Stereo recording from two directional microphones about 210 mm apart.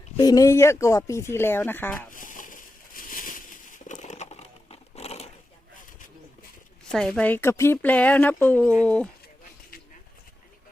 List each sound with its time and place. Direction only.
0.2 s speech: 15° left (ahead or behind)
2.0 s a sound: 40° left (ahead or behind)
6.8 s speech: 5° left (ahead or behind)